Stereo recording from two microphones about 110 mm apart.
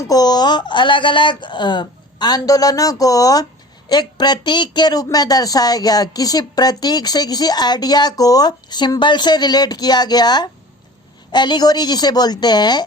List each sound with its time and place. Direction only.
0.1 s speech: 35° left (ahead or behind)